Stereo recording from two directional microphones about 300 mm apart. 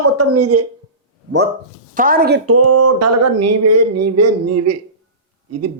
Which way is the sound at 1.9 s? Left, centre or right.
Right.